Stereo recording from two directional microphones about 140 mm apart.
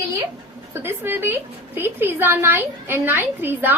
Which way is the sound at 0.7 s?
15° right (ahead or behind).